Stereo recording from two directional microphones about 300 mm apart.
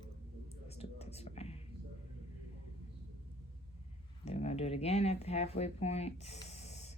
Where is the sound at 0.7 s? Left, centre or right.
Left.